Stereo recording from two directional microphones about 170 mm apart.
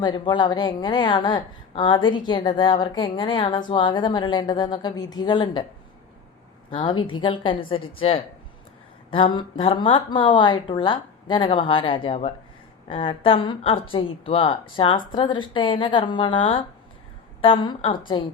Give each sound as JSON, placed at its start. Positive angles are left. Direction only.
{"t": 0.0, "sound": "a woman's voice", "side_deg": 25}
{"t": 6.7, "sound": "a woman's voice", "side_deg": 30}